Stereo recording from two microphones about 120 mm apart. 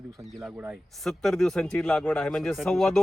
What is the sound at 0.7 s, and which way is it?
A man's voice, 5° left (ahead or behind).